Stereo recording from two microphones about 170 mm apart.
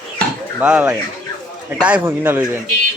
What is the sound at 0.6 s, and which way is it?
Speech, 5° right (ahead or behind).